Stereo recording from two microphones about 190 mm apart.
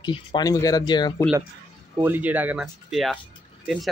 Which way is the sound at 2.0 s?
10° right (ahead or behind).